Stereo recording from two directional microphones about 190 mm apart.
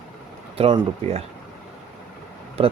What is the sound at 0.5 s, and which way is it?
Speech, 30° right (ahead or behind).